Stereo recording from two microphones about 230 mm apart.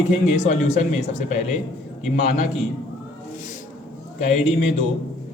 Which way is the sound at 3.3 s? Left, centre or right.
Left.